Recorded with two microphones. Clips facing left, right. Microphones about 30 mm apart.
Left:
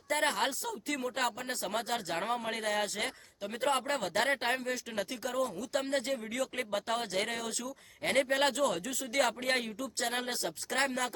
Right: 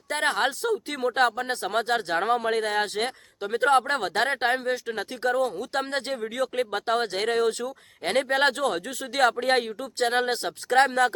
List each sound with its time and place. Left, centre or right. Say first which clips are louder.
0.1 s speech: right 6 dB; right
5.4 s speech: right 6 dB; right
6.6 s speech: right 10 dB; right
9.4 s speech: right 8 dB; right